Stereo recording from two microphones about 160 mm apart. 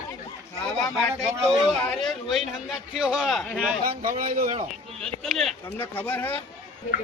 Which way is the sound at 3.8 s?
60° right (ahead or behind).